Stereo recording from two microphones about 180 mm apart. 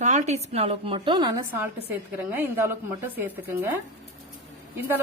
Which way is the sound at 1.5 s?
10° right (ahead or behind).